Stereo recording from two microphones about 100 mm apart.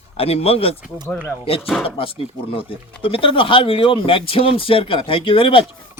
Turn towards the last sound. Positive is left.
turn(degrees=60)  # may be behind; listen again after turning